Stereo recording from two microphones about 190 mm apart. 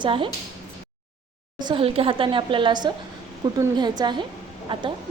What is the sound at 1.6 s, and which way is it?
A woman's voice, 25° right (ahead or behind).